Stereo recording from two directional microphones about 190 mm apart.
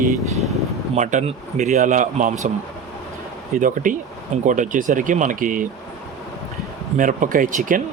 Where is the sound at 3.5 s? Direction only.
45° right (ahead or behind).